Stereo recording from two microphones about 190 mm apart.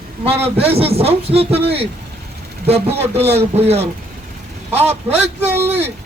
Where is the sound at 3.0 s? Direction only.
35° right (ahead or behind).